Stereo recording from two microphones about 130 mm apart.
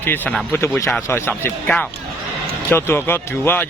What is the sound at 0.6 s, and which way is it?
Speech, 20° left (ahead or behind).